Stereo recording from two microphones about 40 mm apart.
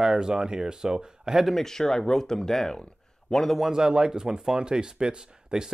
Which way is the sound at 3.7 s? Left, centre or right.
Centre.